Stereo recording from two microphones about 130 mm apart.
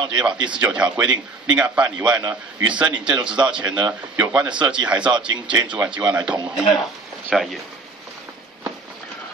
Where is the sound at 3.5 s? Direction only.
10° right (ahead or behind).